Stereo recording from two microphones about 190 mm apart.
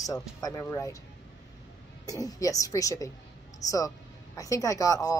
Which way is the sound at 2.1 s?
20° left (ahead or behind).